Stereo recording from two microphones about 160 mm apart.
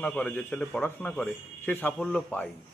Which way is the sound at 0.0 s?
10° left (ahead or behind).